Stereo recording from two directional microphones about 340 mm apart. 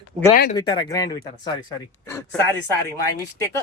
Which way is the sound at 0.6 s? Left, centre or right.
Centre.